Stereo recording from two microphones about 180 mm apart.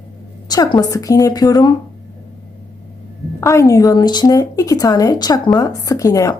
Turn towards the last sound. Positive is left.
turn(degrees=20)  # may be behind; listen again after turning